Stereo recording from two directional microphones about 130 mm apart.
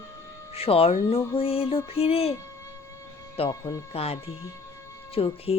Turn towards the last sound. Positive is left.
turn(degrees=45)  # may be behind; listen again after turning